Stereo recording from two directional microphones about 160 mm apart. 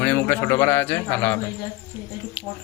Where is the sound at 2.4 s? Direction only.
10° left (ahead or behind).